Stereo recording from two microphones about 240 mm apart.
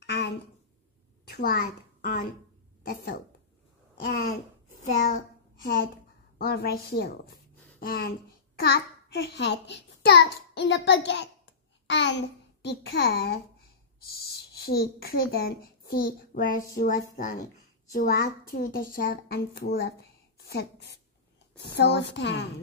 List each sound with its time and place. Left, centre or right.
0.0 s a sound: left
1.3 s a child's voice: left
4.8 s a child's voice: left